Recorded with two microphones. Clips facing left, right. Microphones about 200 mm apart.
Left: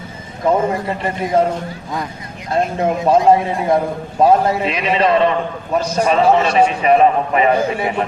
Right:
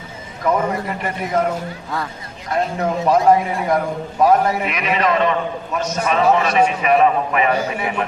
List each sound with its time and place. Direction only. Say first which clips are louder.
0.4 s a man's voice: left 3 dB; 25° left (ahead or behind)
2.5 s a man's voice: left 3 dB; 25° left (ahead or behind)